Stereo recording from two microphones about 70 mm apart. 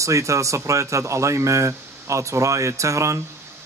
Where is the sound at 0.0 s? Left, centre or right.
Right.